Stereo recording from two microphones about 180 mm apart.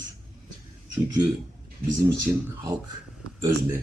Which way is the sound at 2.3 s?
15° right (ahead or behind).